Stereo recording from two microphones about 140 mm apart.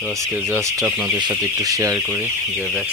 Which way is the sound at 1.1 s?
30° right (ahead or behind).